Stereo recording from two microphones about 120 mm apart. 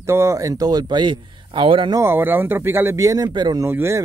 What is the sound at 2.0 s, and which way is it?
Speech, 20° right (ahead or behind).